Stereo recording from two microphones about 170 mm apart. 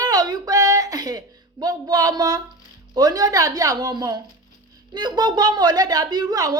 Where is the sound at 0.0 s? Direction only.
25° right (ahead or behind).